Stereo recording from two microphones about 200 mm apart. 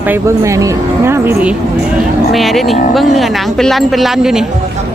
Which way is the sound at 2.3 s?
Centre (ahead or behind).